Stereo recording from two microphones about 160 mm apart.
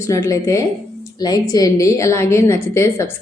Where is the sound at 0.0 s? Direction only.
20° left (ahead or behind).